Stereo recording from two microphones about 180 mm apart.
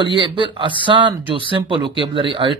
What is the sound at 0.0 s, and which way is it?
Speech, 30° right (ahead or behind).